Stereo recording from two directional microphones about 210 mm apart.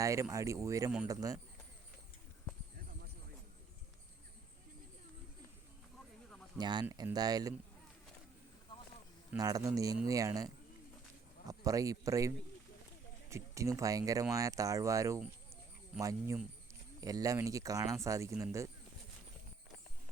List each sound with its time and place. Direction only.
0.0 s speech: 15° right (ahead or behind)
6.6 s speech: 20° right (ahead or behind)
9.4 s speech: 15° right (ahead or behind)
13.3 s speech: 15° right (ahead or behind)